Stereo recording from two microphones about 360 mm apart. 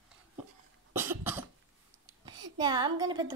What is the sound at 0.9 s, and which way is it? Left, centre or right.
Cough, centre.